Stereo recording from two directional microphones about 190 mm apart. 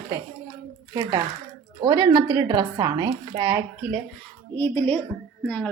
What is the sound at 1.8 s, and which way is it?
A woman's voice, 20° right (ahead or behind).